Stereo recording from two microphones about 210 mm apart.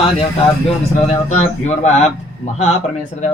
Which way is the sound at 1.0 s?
35° left (ahead or behind).